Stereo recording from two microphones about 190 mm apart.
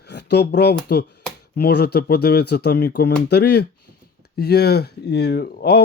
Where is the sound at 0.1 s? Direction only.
60° left (ahead or behind).